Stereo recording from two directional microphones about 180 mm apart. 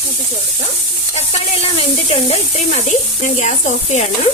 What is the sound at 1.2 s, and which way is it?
A woman's voice, 35° left (ahead or behind).